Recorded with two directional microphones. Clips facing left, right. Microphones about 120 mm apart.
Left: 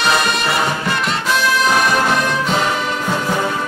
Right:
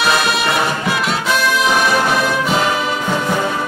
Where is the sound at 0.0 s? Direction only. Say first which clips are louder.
Right 1 dB; centre (ahead or behind).